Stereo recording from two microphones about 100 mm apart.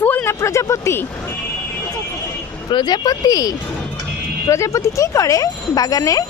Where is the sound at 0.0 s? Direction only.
15° left (ahead or behind).